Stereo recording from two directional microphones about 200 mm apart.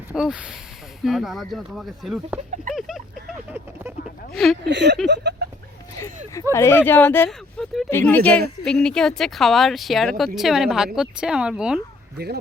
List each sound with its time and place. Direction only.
0.1 s speech: 5° right (ahead or behind)
2.7 s a sound: centre (ahead or behind)
4.3 s speech: centre (ahead or behind)
4.6 s speech: 60° right (ahead or behind)
6.5 s speech: 15° left (ahead or behind); by 11.8 s 5° right (ahead or behind)
12.1 s speech: 55° right (ahead or behind)